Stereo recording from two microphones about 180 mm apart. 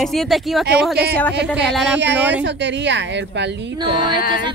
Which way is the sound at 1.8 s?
80° right.